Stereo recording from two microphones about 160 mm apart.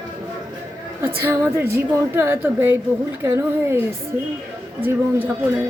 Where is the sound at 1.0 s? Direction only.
15° right (ahead or behind).